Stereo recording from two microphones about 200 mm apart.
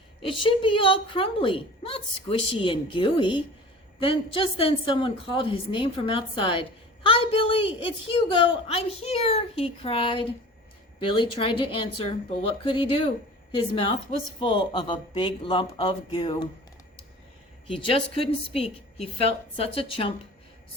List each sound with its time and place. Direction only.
0.2 s a woman's voice: 25° left (ahead or behind)
14.3 s a woman's voice: 25° left (ahead or behind)
17.7 s a woman's voice: 25° left (ahead or behind)